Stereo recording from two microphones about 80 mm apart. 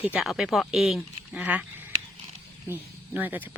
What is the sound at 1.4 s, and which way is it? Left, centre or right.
Speech, centre.